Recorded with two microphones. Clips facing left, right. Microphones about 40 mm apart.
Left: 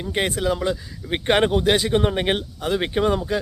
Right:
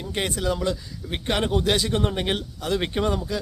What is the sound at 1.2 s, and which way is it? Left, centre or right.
Speech, left.